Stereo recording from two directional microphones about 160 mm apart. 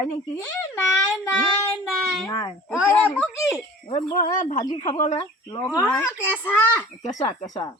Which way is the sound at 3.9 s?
30° left (ahead or behind).